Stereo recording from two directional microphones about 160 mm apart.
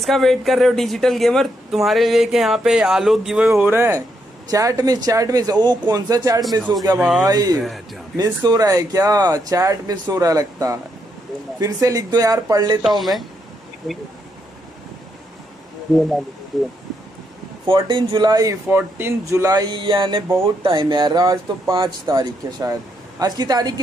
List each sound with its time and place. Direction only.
0.0 s speech: centre (ahead or behind); by 7.0 s 25° right (ahead or behind)
7.0 s speech: centre (ahead or behind)
7.2 s speech: 25° right (ahead or behind)
13.9 s speech: centre (ahead or behind)
15.9 s speech: centre (ahead or behind)
17.7 s speech: 30° right (ahead or behind)